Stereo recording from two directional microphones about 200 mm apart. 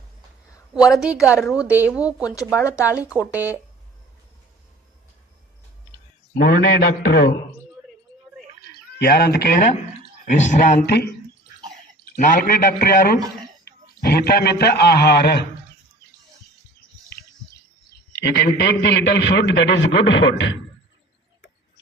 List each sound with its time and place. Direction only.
1.0 s speech: 5° right (ahead or behind)
2.2 s speech: 15° left (ahead or behind)
3.0 s speech: 5° right (ahead or behind)
6.3 s a man's voice: 55° left (ahead or behind)
9.0 s a man's voice: 50° left (ahead or behind)
10.8 s a man's voice: 55° left (ahead or behind)
12.1 s a man's voice: 45° left (ahead or behind)
17.1 s bird: 55° left (ahead or behind)
18.1 s a man's voice: 55° left (ahead or behind)